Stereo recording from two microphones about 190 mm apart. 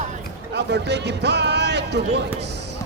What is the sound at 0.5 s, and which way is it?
Speech, 65° right (ahead or behind).